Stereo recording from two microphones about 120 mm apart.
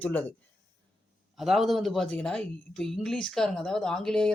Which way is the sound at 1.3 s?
Centre (ahead or behind).